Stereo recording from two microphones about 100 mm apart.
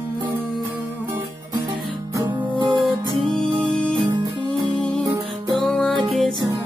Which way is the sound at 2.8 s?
5° left (ahead or behind).